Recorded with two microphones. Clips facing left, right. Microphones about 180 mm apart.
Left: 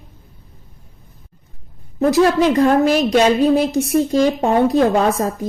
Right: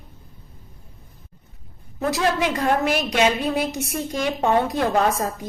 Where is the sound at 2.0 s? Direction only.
40° left (ahead or behind).